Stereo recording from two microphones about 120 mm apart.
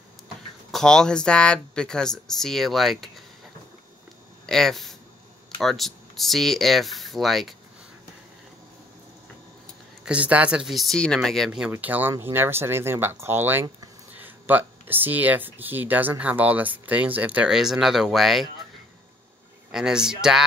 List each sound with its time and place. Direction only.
0.7 s speech: 5° left (ahead or behind)
4.5 s speech: 5° left (ahead or behind)
10.0 s speech: 10° right (ahead or behind)
11.7 s speech: 15° right (ahead or behind)
19.7 s speech: 5° right (ahead or behind)